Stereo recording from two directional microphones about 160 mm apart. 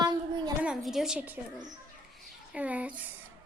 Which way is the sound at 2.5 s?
10° right (ahead or behind).